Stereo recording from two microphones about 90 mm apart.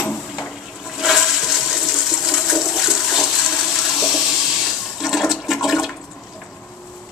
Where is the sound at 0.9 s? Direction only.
Centre (ahead or behind).